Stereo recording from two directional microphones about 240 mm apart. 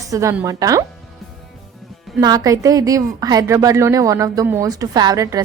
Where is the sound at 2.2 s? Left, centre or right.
Centre.